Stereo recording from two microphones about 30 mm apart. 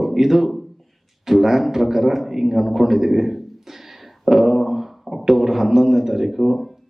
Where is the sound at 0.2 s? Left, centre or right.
Centre.